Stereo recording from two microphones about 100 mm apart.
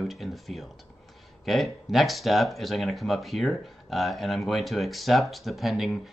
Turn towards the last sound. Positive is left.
turn(degrees=0)  # may be behind; listen again after turning